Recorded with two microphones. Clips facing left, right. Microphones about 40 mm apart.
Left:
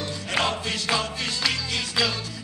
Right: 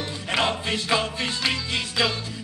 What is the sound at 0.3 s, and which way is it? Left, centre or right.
Music, right.